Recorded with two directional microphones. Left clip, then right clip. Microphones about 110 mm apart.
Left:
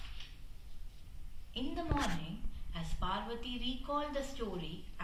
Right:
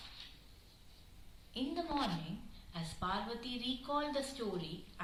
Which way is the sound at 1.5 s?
15° right (ahead or behind).